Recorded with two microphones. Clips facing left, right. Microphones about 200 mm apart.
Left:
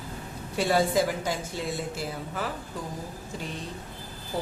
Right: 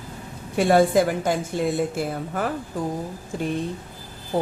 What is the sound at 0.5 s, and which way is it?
A woman's voice, 55° right (ahead or behind).